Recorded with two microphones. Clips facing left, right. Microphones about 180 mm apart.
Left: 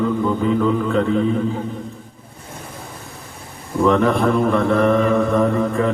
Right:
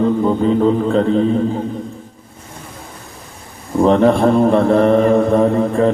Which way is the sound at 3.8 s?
30° right (ahead or behind).